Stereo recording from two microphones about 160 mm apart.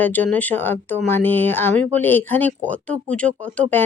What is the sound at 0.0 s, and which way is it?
Speech, 10° left (ahead or behind).